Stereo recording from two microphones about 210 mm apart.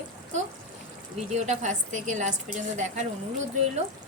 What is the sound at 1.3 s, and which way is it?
A woman's voice, 35° right (ahead or behind).